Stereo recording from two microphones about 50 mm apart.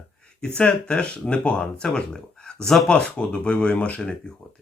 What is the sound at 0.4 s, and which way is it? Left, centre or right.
Speech, centre.